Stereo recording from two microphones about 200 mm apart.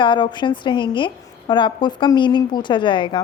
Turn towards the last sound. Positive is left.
turn(degrees=25)  # may be behind; listen again after turning